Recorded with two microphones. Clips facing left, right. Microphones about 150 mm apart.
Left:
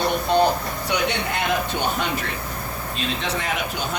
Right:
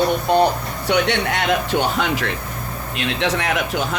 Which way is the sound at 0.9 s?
70° right (ahead or behind).